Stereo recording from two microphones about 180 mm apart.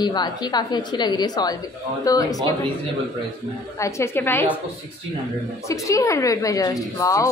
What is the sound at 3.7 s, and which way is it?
Speech, 15° left (ahead or behind).